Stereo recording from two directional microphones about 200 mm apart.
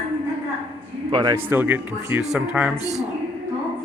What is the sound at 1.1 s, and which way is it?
Speech, 25° right (ahead or behind).